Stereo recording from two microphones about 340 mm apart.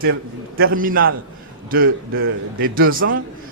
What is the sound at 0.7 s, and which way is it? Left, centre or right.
A man's voice, right.